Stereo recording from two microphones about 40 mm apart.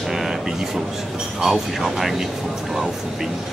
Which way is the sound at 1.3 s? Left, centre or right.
Centre.